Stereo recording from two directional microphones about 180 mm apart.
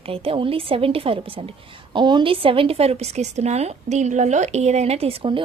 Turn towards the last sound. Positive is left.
turn(degrees=-30)  # may be behind; listen again after turning